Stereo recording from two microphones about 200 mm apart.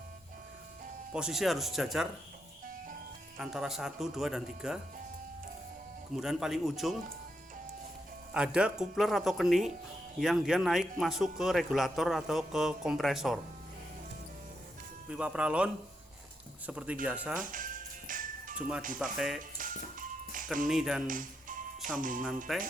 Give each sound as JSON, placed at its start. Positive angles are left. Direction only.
{"t": 1.1, "sound": "a man's voice", "side_deg": -5}
{"t": 2.6, "sound": "music", "side_deg": -45}
{"t": 3.3, "sound": "a man's voice", "side_deg": 0}
{"t": 6.1, "sound": "a man's voice", "side_deg": 0}
{"t": 8.3, "sound": "a man's voice", "side_deg": -5}
{"t": 15.1, "sound": "a man's voice", "side_deg": -5}
{"t": 17.4, "sound": "music", "side_deg": -40}
{"t": 19.1, "sound": "a man's voice", "side_deg": 0}
{"t": 19.5, "sound": "music", "side_deg": -40}
{"t": 20.7, "sound": "a man's voice", "side_deg": 0}
{"t": 21.8, "sound": "music", "side_deg": 0}
{"t": 22.5, "sound": "a man's voice", "side_deg": 0}